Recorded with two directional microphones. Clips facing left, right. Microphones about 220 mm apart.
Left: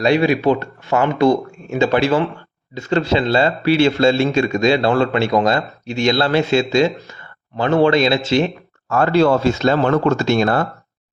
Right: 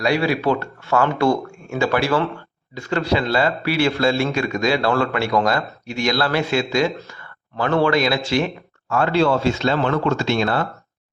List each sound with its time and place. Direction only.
0.0 s a man's voice: 20° left (ahead or behind)
8.9 s speech: 40° left (ahead or behind)